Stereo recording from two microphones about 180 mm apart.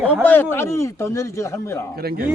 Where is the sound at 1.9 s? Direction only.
55° right (ahead or behind).